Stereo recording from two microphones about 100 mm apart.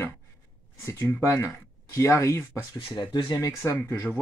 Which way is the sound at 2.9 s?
45° left (ahead or behind).